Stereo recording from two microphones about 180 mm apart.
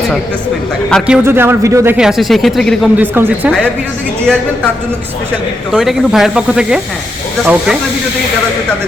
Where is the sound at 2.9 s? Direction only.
10° right (ahead or behind).